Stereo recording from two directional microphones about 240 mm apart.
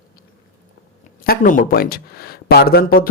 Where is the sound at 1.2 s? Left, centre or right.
Left.